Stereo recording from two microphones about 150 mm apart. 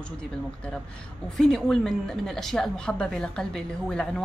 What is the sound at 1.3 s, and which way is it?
A woman's voice, centre (ahead or behind).